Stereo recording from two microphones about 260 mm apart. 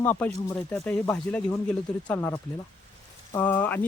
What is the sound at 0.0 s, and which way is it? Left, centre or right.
Speech, centre.